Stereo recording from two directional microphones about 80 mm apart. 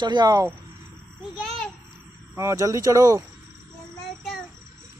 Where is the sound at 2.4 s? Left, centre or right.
Right.